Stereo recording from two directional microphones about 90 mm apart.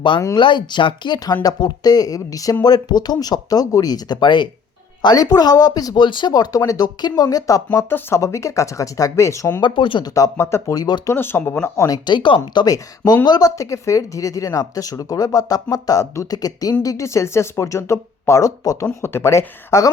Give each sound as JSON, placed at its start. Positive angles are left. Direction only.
{"t": 0.3, "sound": "speech", "side_deg": 60}
{"t": 5.0, "sound": "speech", "side_deg": 45}
{"t": 6.0, "sound": "speech", "side_deg": 60}
{"t": 7.9, "sound": "speech", "side_deg": 25}
{"t": 8.2, "sound": "speech", "side_deg": 35}
{"t": 9.6, "sound": "speech", "side_deg": 60}
{"t": 10.0, "sound": "speech", "side_deg": 40}
{"t": 10.8, "sound": "speech", "side_deg": 50}
{"t": 11.0, "sound": "speech", "side_deg": 25}
{"t": 11.9, "sound": "speech", "side_deg": 55}
{"t": 12.5, "sound": "speech", "side_deg": 45}
{"t": 13.6, "sound": "speech", "side_deg": 35}
{"t": 19.0, "sound": "speech", "side_deg": 30}